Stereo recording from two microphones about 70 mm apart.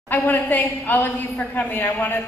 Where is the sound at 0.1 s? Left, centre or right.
Left.